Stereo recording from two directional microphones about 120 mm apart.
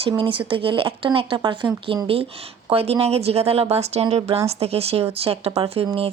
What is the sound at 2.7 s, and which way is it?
Speech, 50° right (ahead or behind).